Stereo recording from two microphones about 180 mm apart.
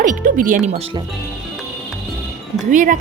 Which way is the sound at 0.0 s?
45° right (ahead or behind).